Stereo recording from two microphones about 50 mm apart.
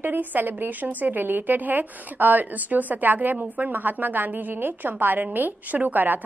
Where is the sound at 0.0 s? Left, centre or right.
Right.